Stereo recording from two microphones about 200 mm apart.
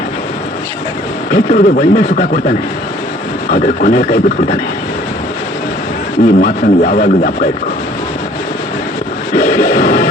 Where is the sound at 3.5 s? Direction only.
40° left (ahead or behind).